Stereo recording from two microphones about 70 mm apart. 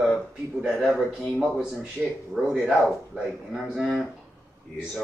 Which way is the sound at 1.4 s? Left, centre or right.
Centre.